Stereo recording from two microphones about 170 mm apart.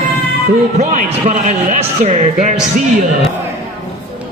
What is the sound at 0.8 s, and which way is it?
A man's voice, 50° right (ahead or behind).